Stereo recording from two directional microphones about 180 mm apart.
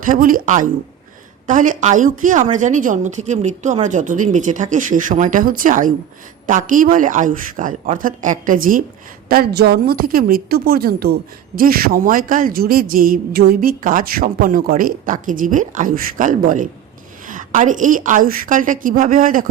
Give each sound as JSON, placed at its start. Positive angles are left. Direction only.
{"t": 0.0, "sound": "a woman's voice", "side_deg": -50}